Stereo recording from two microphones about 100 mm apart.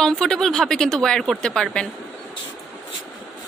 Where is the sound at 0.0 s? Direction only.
5° left (ahead or behind).